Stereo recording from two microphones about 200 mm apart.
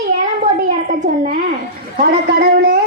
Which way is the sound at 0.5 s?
40° right (ahead or behind).